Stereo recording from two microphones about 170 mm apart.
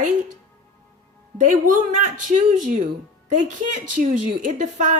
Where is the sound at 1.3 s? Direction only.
50° right (ahead or behind).